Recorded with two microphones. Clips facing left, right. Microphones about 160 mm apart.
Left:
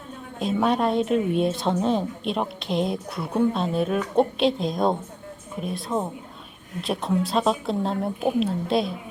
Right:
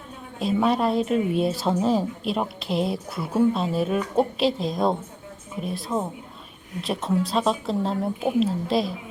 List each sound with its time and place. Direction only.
0.3 s a woman's voice: centre (ahead or behind)